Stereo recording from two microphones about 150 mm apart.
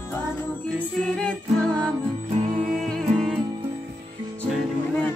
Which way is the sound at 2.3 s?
50° right (ahead or behind).